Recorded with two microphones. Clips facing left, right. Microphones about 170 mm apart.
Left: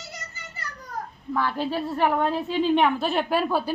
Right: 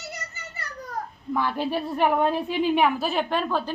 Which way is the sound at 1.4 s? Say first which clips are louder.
Even; 15° right (ahead or behind).